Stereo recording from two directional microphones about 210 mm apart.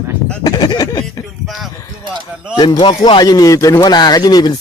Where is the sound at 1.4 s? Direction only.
Centre (ahead or behind).